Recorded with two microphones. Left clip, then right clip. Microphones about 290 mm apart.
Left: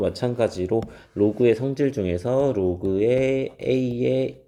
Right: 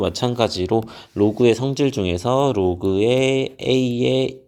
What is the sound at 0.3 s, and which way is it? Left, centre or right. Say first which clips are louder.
Speech: right 4 dB; right.